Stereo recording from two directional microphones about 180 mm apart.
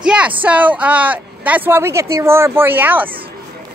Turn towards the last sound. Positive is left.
turn(degrees=-10)  # may be behind; listen again after turning